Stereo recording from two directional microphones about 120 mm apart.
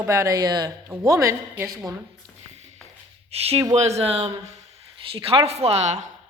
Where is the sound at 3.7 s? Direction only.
65° right (ahead or behind).